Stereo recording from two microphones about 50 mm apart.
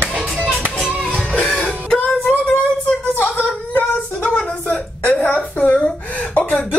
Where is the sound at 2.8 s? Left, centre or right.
Left.